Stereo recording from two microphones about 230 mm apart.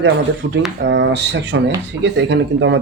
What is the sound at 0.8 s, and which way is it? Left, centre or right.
Speech, right.